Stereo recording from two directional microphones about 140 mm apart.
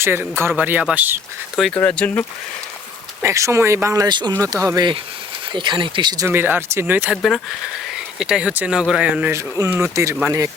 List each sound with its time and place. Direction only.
0.0 s speech: 15° right (ahead or behind)
1.5 s speech: 5° left (ahead or behind)
3.2 s speech: 20° right (ahead or behind)
6.2 s speech: 15° right (ahead or behind)
7.2 s speech: centre (ahead or behind)
9.3 s speech: 20° right (ahead or behind)